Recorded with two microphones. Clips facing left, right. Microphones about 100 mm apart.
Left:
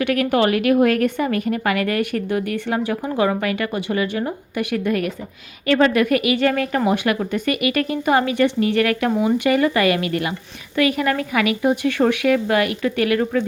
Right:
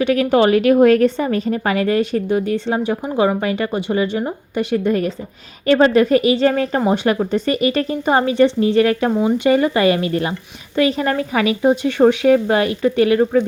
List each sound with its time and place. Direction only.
0.0 s a woman's voice: 25° right (ahead or behind)